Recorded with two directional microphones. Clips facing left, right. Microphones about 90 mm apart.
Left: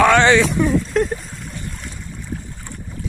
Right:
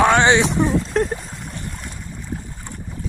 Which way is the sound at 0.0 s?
20° right (ahead or behind).